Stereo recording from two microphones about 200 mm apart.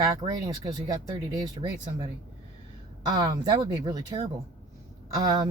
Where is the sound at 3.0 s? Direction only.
20° right (ahead or behind).